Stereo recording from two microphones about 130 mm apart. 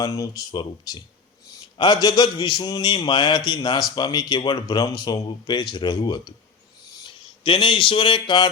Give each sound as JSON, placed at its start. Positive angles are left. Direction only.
{"t": 0.0, "sound": "speech", "side_deg": 25}
{"t": 0.5, "sound": "a man's voice", "side_deg": 35}